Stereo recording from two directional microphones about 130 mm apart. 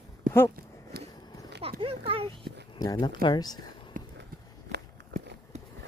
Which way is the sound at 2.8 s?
30° left (ahead or behind).